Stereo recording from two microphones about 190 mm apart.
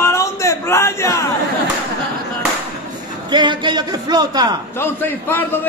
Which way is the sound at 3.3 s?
25° right (ahead or behind).